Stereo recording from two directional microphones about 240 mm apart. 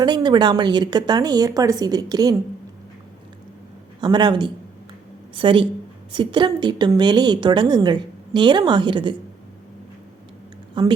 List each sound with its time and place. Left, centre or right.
0.0 s a woman's voice: centre
4.0 s a woman's voice: centre
10.8 s a woman's voice: centre